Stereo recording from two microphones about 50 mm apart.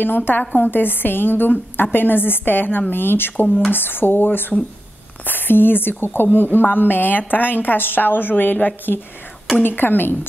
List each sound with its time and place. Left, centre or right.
0.0 s a woman's voice: left
9.6 s speech: left